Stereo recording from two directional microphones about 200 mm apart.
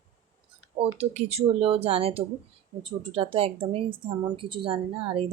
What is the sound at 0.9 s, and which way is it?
Speech, 30° right (ahead or behind).